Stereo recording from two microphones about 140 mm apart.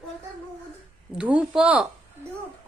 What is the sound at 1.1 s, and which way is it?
Speech, 10° right (ahead or behind).